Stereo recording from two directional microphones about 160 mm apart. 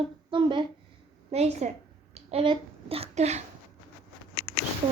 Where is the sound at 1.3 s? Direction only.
45° right (ahead or behind).